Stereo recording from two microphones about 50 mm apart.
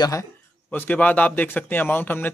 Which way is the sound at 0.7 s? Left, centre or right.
Left.